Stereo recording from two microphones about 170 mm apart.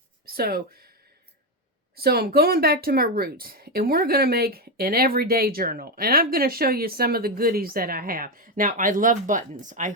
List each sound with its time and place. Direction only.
0.3 s speech: 65° right (ahead or behind)
2.0 s speech: 65° right (ahead or behind); by 9.9 s 50° right (ahead or behind)